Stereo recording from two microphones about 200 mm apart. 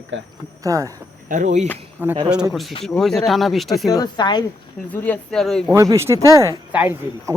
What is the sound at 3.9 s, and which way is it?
Speech, 20° left (ahead or behind).